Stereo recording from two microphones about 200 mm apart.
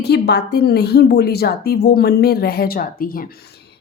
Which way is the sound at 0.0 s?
55° left (ahead or behind).